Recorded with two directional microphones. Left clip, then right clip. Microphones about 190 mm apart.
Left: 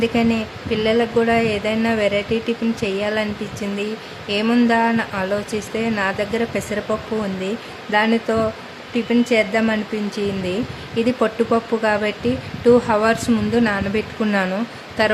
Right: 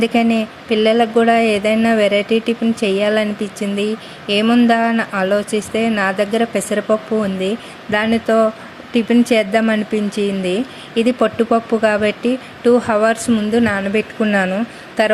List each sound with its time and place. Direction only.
0.0 s a woman's voice: 20° right (ahead or behind)